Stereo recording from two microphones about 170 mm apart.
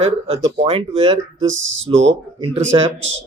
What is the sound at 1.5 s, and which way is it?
Speech, 90° right.